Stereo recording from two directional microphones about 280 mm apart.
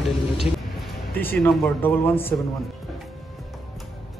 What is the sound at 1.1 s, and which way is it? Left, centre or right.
Speech, centre.